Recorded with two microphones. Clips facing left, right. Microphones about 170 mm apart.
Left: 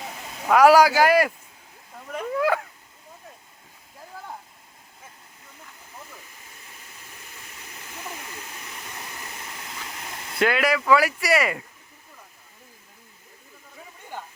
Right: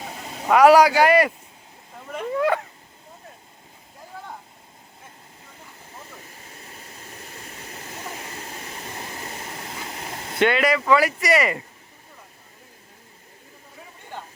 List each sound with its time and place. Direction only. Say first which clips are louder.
0.4 s speech: right 1 dB; centre (ahead or behind)
6.6 s waterfall: right 7 dB; 35° right (ahead or behind)
10.4 s speech: right 2 dB; centre (ahead or behind)